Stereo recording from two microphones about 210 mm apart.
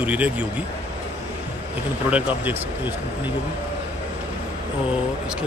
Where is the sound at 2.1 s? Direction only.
10° right (ahead or behind).